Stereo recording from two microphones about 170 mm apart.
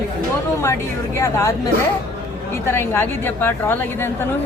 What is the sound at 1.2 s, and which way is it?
Speech, 15° left (ahead or behind).